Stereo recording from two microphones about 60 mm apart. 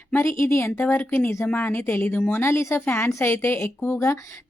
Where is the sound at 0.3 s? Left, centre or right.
Left.